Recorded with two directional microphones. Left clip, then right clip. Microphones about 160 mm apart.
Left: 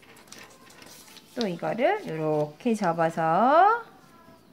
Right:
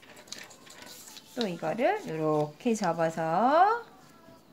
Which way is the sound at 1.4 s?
15° left (ahead or behind).